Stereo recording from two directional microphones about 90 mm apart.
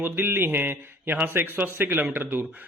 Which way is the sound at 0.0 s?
20° right (ahead or behind).